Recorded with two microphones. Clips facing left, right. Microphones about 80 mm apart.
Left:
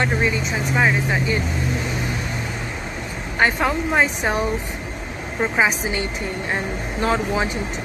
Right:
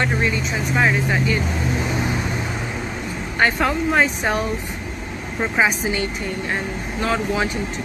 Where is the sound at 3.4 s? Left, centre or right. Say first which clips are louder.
Right 1 dB; centre.